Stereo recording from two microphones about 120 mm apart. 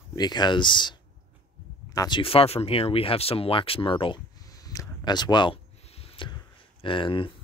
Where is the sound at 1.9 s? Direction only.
40° left (ahead or behind).